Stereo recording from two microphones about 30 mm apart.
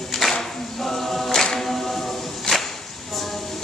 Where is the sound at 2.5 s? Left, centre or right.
Left.